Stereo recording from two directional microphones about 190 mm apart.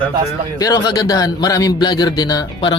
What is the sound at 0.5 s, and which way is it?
A man's voice, 20° left (ahead or behind).